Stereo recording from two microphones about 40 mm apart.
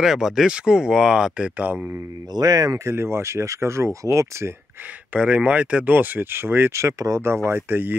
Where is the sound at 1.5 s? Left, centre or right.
Right.